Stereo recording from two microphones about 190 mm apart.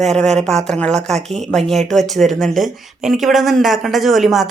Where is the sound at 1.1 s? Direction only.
35° right (ahead or behind).